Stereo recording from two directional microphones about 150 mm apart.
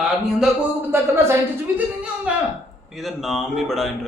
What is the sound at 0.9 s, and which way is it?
A man's voice, 15° right (ahead or behind).